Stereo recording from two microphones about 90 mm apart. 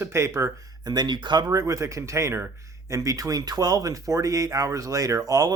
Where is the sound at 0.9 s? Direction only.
55° right (ahead or behind).